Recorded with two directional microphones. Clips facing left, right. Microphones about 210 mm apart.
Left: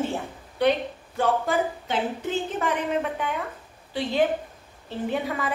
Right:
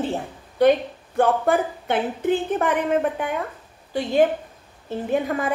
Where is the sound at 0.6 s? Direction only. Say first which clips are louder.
Right 6 dB; 45° right (ahead or behind).